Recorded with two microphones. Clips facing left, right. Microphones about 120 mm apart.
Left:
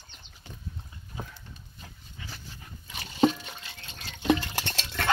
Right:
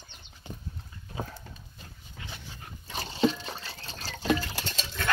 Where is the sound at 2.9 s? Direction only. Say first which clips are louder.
Right 6 dB; 30° right (ahead or behind).